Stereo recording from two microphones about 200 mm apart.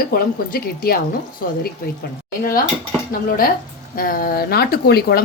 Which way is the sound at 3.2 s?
45° left (ahead or behind).